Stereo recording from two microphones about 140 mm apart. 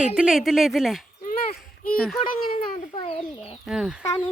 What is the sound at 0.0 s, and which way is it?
A child's voice, 5° right (ahead or behind).